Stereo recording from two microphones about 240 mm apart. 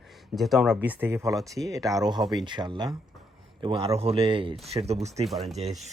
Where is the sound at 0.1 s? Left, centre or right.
Centre; by 4.9 s right.